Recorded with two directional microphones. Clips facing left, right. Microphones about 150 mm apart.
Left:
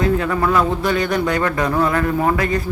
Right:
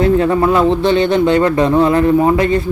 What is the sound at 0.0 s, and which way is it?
A man's voice, 30° right (ahead or behind).